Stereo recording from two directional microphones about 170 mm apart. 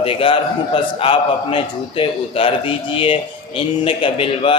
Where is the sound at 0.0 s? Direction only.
35° left (ahead or behind).